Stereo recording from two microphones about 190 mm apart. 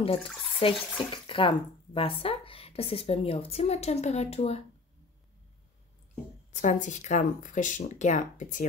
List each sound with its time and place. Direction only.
0.0 s a woman's voice: 30° left (ahead or behind)
6.5 s a woman's voice: 40° left (ahead or behind)